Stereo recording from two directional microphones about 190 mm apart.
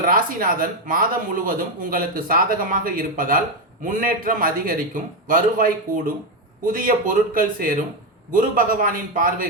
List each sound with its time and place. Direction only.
0.1 s speech: 50° right (ahead or behind)